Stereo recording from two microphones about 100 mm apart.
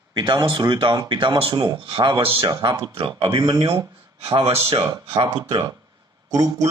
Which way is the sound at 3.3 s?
45° right (ahead or behind).